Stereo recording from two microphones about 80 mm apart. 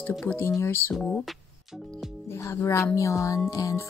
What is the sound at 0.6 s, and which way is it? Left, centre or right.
Speech, left.